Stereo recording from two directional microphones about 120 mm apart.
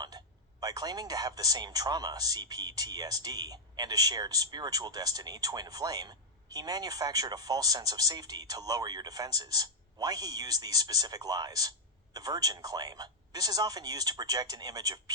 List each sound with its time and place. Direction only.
0.6 s speech: 35° right (ahead or behind)